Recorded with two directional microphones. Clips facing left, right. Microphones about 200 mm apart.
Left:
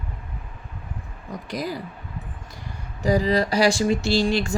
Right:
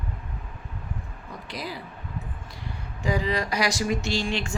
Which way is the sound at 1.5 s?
45° left (ahead or behind).